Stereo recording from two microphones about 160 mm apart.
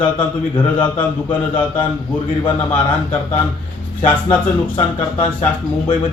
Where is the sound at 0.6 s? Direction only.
10° left (ahead or behind).